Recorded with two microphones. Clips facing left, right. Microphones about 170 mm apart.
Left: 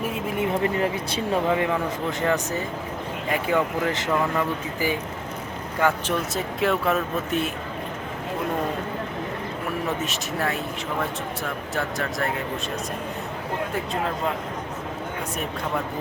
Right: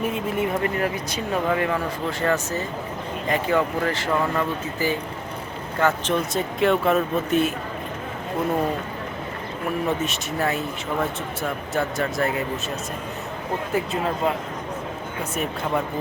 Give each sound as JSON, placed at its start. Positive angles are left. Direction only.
{"t": 0.3, "sound": "speech", "side_deg": 25}
{"t": 10.0, "sound": "speech", "side_deg": 0}
{"t": 11.7, "sound": "speech", "side_deg": 0}